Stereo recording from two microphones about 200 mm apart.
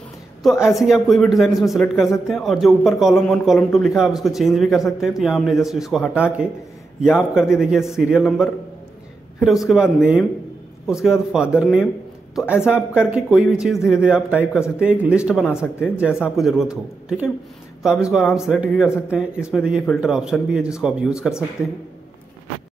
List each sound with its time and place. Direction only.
0.4 s a woman's voice: centre (ahead or behind)
15.4 s speech: 10° left (ahead or behind)
15.8 s speech: 5° right (ahead or behind)
17.8 s speech: centre (ahead or behind)